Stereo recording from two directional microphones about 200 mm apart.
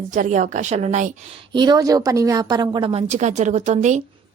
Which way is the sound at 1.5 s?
20° right (ahead or behind).